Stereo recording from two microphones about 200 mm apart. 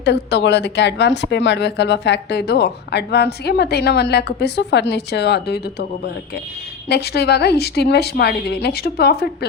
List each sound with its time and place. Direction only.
0.0 s speech: 60° left (ahead or behind)
6.8 s speech: 55° left (ahead or behind)